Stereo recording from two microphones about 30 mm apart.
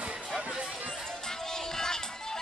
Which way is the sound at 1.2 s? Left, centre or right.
Centre.